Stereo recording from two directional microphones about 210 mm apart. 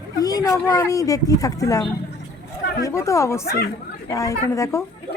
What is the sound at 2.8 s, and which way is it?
Speech, 15° left (ahead or behind).